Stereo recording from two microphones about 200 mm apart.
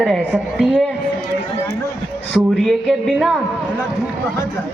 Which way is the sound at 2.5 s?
Centre (ahead or behind).